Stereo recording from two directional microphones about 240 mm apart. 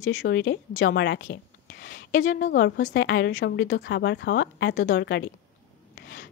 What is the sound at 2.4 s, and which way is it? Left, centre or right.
A woman's voice, left.